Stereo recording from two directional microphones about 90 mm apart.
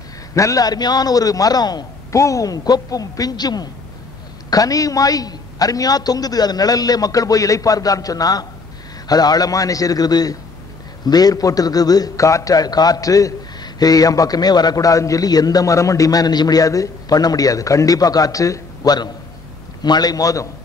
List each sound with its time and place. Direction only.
0.3 s a man's voice: 35° left (ahead or behind)
2.1 s a man's voice: 35° left (ahead or behind)